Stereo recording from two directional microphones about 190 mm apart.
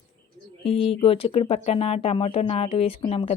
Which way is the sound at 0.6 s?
30° left (ahead or behind).